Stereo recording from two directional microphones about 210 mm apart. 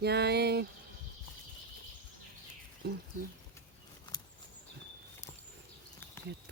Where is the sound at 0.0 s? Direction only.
50° right (ahead or behind).